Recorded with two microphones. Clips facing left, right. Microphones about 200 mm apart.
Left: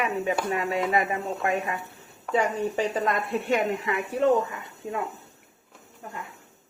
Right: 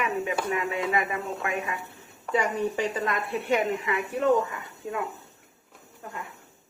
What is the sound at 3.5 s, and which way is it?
Speech, 40° left (ahead or behind).